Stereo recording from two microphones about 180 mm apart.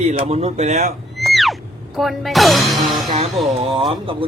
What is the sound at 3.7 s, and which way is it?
Speech, 30° right (ahead or behind).